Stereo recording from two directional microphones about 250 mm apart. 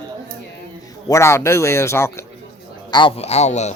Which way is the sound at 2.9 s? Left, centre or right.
Left.